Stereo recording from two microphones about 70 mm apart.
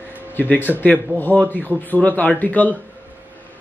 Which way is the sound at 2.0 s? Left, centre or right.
Left.